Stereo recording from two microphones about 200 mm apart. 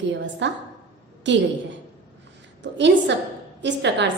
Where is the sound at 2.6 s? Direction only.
60° right (ahead or behind).